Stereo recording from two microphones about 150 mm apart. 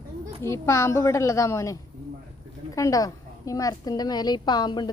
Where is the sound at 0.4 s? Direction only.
20° left (ahead or behind).